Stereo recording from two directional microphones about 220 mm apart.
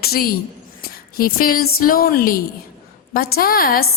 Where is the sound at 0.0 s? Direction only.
45° left (ahead or behind).